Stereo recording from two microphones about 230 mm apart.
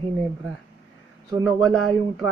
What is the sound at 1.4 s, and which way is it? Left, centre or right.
Speech, centre.